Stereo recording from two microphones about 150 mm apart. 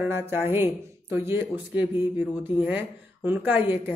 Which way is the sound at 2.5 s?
35° left (ahead or behind).